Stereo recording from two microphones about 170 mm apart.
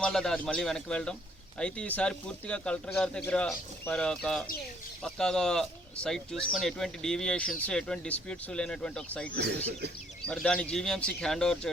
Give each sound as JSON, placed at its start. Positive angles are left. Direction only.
{"t": 0.0, "sound": "speech", "side_deg": 5}
{"t": 9.3, "sound": "speech", "side_deg": -70}
{"t": 10.2, "sound": "speech", "side_deg": 5}